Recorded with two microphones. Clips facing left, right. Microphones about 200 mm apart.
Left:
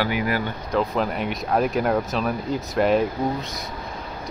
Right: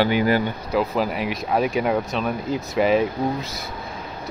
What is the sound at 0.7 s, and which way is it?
Speech, 5° right (ahead or behind).